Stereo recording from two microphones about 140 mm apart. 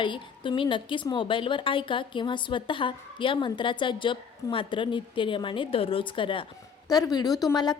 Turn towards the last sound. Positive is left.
turn(degrees=30)  # may be behind; listen again after turning